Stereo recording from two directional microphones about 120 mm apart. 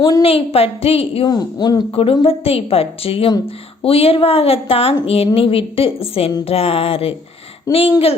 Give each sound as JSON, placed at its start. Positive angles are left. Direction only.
{"t": 0.2, "sound": "a woman's voice", "side_deg": 55}
{"t": 1.2, "sound": "a woman's voice", "side_deg": 35}
{"t": 2.2, "sound": "a woman's voice", "side_deg": 55}